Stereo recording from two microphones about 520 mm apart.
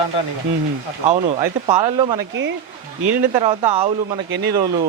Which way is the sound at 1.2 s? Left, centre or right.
Centre.